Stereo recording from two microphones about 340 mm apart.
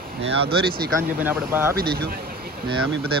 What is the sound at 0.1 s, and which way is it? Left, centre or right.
Speech, right.